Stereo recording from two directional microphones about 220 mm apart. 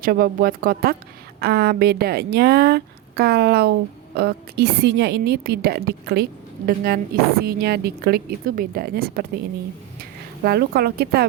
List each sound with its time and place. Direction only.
0.0 s speech: 40° right (ahead or behind)